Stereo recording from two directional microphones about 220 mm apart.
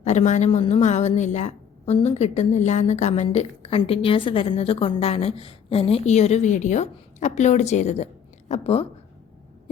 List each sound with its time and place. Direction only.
0.0 s a woman's voice: 30° left (ahead or behind)